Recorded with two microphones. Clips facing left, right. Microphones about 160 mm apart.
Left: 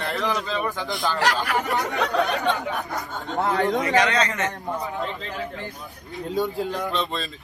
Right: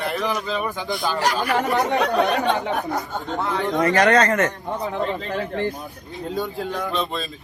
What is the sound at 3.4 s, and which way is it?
Speech, 45° left (ahead or behind).